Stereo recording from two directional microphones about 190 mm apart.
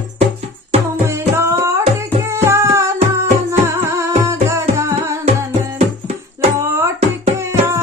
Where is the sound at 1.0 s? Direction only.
15° right (ahead or behind).